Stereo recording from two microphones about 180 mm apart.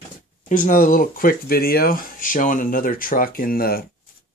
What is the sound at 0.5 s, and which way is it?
Speech, 45° left (ahead or behind).